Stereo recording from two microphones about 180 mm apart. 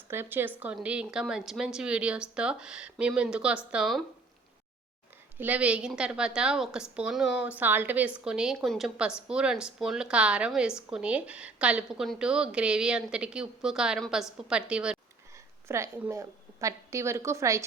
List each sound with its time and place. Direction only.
0.1 s a woman's voice: 10° right (ahead or behind)
5.4 s a woman's voice: 10° right (ahead or behind)